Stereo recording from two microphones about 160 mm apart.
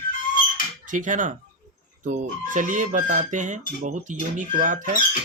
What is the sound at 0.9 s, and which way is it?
Speech, 55° right (ahead or behind).